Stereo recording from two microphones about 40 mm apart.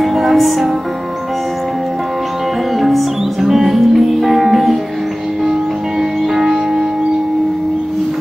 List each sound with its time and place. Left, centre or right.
0.0 s music: centre
2.8 s music: centre
6.3 s music: centre